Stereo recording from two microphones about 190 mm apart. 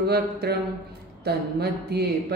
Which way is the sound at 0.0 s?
55° right (ahead or behind).